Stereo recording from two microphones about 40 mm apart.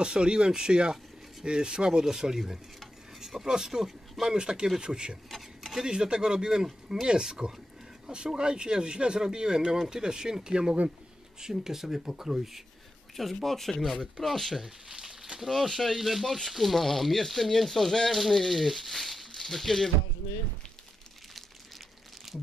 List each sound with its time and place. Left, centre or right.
0.0 s speech: right
5.3 s a sound: centre
5.9 s speech: centre
13.1 s speech: centre
14.9 s a sound: centre
15.5 s speech: centre
22.3 s crumpling: centre